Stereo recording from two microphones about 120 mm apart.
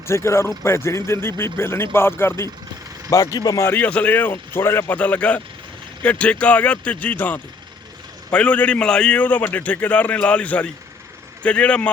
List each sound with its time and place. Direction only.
0.1 s speech: 20° left (ahead or behind)
3.3 s speech: 30° left (ahead or behind)
3.7 s a man's voice: 15° left (ahead or behind)